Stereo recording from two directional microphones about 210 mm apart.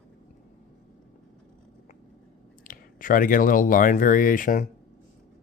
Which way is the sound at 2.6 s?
40° left (ahead or behind).